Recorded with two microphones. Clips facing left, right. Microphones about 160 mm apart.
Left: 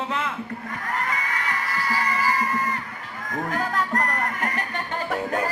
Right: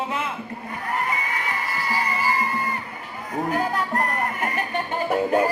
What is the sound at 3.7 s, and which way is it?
Speech, 10° right (ahead or behind).